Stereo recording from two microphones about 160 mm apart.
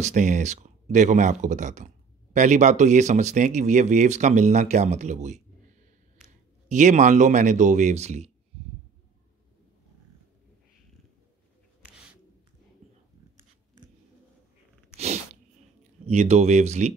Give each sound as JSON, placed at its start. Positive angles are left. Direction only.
{"t": 0.0, "sound": "speech", "side_deg": -50}
{"t": 6.7, "sound": "speech", "side_deg": -50}
{"t": 16.1, "sound": "speech", "side_deg": -45}